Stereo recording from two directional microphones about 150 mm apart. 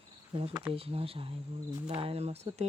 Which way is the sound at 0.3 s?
30° right (ahead or behind).